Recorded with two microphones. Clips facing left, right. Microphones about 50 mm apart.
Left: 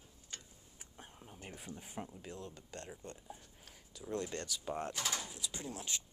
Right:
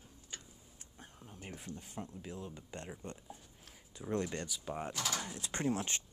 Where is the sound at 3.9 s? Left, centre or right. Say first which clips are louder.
Right 3 dB; right.